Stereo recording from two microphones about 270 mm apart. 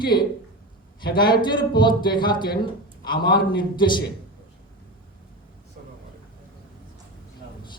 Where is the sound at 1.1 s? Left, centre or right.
Centre.